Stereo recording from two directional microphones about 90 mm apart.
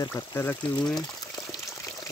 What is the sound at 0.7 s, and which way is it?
Speech, 10° left (ahead or behind).